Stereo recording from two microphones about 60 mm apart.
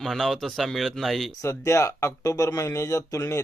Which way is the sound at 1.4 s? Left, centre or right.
Left.